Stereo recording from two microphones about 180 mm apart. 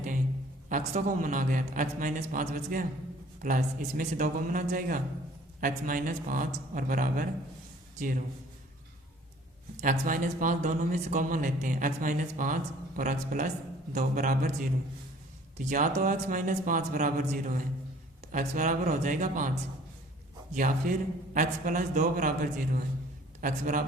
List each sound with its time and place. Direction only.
0.7 s a man's voice: 45° right (ahead or behind)
9.8 s speech: 45° right (ahead or behind)
20.5 s speech: 45° right (ahead or behind)